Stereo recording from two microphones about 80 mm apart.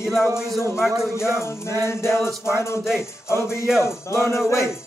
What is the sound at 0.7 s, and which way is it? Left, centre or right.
Music, centre.